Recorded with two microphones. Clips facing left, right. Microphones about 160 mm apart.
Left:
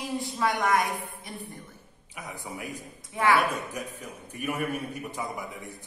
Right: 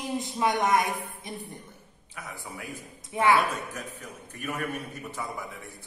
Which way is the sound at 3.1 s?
20° right (ahead or behind).